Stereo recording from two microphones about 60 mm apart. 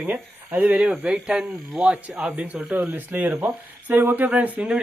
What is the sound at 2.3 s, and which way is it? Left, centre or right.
A man's voice, right.